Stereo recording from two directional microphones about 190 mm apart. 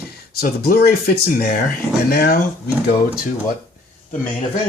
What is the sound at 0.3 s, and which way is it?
Speech, 55° left (ahead or behind).